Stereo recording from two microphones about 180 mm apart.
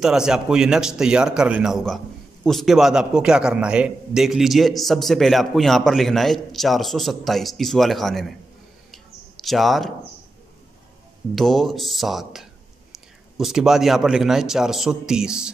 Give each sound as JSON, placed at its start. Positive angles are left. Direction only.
{"t": 0.0, "sound": "a man's voice", "side_deg": -5}
{"t": 8.9, "sound": "a sound", "side_deg": 0}
{"t": 11.3, "sound": "a man's voice", "side_deg": 0}